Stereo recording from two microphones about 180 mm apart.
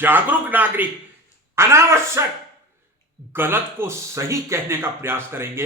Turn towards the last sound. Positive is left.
turn(degrees=-15)  # may be behind; listen again after turning